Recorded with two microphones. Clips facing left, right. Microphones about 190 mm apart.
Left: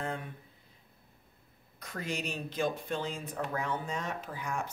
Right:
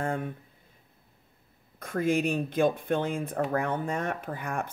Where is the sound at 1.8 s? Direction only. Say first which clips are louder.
Right 11 dB; 50° right (ahead or behind).